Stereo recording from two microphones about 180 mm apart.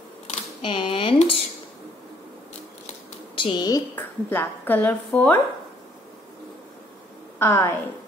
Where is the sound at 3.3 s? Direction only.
25° left (ahead or behind).